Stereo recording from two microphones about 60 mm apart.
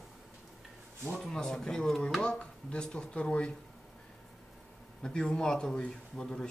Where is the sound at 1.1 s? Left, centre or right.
Centre.